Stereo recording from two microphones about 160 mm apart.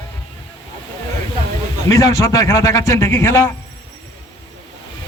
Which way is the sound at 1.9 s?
20° left (ahead or behind).